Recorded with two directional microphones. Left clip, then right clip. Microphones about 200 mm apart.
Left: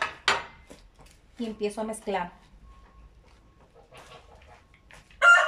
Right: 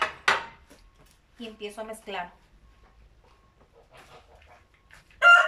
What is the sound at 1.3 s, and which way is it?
Speech, 25° left (ahead or behind).